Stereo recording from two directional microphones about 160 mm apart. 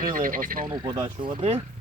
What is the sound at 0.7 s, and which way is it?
Speech, 30° right (ahead or behind).